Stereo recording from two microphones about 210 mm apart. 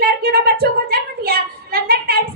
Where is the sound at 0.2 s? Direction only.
45° right (ahead or behind).